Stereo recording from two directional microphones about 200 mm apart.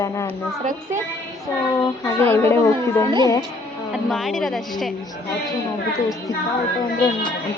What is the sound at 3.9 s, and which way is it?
A woman's voice, centre (ahead or behind).